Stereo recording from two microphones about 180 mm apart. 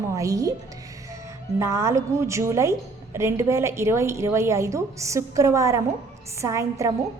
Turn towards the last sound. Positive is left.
turn(degrees=-15)  # may be behind; listen again after turning